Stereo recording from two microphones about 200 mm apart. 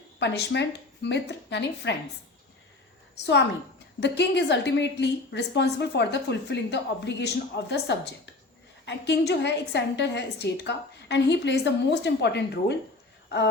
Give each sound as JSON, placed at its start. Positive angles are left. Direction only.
{"t": 0.2, "sound": "a woman's voice", "side_deg": 60}
{"t": 4.0, "sound": "a woman's voice", "side_deg": 60}